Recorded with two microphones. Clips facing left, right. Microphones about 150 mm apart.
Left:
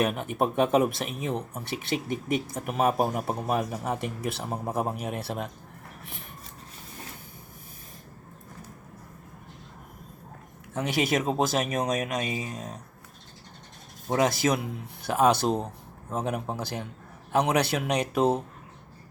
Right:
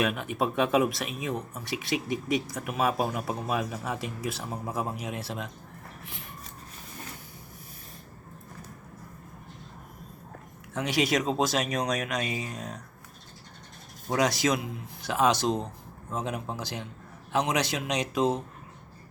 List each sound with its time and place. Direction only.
0.0 s a man's voice: 45° left (ahead or behind)
10.8 s speech: 50° left (ahead or behind)
12.1 s speech: 25° left (ahead or behind)
14.3 s a man's voice: 55° left (ahead or behind)